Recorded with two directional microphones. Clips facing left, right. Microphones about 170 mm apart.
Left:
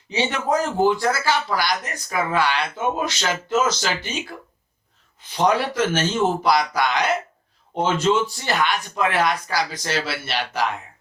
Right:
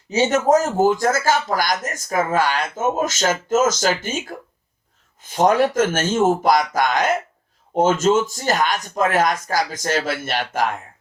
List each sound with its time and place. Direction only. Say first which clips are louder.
0.1 s speech: right 6 dB; 45° right (ahead or behind)